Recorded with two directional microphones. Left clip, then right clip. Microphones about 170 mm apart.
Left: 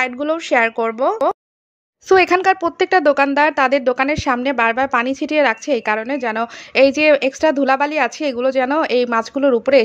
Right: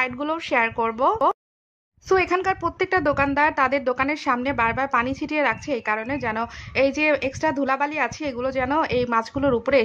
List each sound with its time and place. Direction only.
0.0 s speech: 20° left (ahead or behind)
2.0 s speech: 35° left (ahead or behind)